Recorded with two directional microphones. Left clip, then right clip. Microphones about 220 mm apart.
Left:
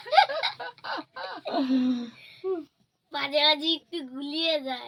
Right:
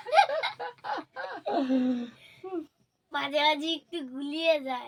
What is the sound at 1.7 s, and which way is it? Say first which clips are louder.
Speech: left 1 dB; 25° right (ahead or behind).